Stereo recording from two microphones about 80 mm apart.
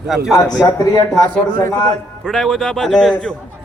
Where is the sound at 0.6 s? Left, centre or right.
Left.